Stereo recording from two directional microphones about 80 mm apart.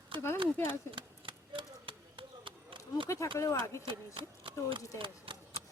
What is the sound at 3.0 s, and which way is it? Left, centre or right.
Speech, left.